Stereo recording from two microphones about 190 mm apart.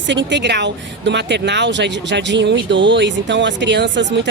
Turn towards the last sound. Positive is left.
turn(degrees=-65)  # may be behind; listen again after turning